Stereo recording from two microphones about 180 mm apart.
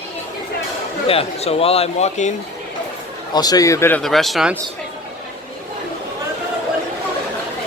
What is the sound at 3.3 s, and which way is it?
Speech, 20° left (ahead or behind).